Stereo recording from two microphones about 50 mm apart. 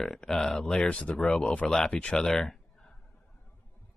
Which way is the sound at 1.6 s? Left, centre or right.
Centre.